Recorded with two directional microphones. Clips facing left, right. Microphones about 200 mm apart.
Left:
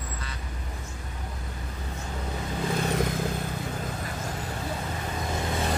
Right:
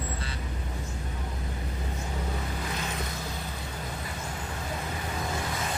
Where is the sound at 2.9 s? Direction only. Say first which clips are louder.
Left 9 dB; 50° left (ahead or behind).